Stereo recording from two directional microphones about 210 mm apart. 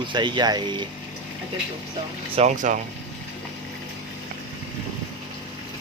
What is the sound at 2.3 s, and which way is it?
Speech, 35° right (ahead or behind).